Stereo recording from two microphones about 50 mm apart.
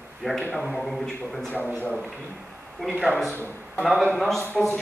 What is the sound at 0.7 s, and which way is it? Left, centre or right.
Speech, centre.